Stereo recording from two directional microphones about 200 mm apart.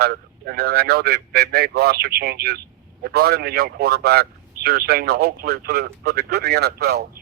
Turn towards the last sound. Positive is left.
turn(degrees=-55)  # may be behind; listen again after turning